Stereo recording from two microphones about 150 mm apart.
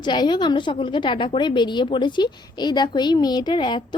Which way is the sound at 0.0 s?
30° left (ahead or behind).